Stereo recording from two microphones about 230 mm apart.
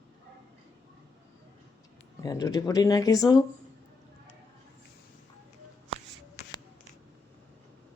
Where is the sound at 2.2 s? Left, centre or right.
Centre.